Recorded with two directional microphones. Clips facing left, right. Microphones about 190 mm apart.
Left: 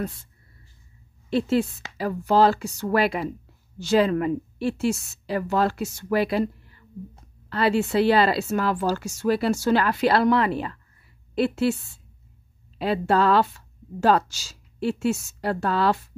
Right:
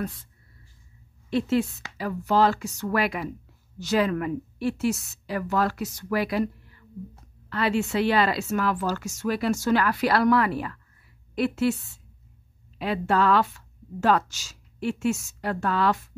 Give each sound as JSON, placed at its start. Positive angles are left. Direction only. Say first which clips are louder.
{"t": 1.3, "sound": "a woman's voice", "louder": "left 2 dB", "side_deg": 30}